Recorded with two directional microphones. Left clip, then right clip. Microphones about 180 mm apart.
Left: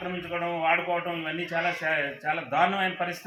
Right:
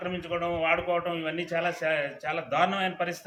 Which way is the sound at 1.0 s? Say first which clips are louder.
Even; 35° right (ahead or behind).